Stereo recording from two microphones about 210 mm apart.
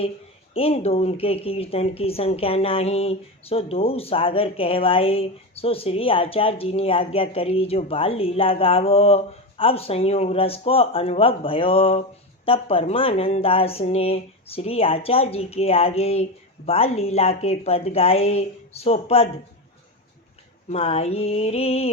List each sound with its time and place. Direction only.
0.5 s speech: 30° left (ahead or behind)
20.7 s speech: 30° left (ahead or behind)